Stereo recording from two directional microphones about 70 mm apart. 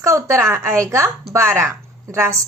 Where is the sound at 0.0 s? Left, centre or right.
Right.